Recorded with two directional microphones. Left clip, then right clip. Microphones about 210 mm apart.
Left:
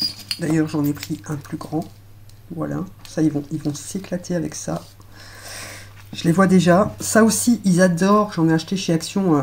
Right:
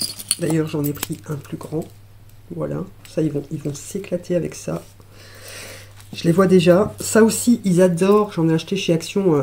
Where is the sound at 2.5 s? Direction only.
45° right (ahead or behind).